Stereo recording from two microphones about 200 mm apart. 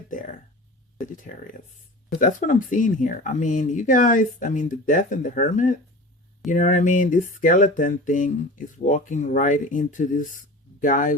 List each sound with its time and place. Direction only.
0.1 s speech: 40° left (ahead or behind)